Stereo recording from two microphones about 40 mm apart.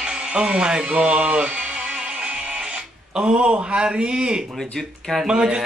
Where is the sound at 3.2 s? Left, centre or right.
Right.